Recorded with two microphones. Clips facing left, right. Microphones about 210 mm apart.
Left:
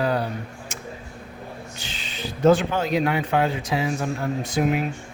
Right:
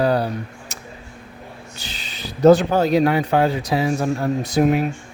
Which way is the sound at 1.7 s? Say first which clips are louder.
Left 1 dB; 40° right (ahead or behind).